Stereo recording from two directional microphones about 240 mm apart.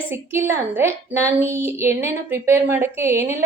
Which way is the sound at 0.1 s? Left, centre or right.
Centre.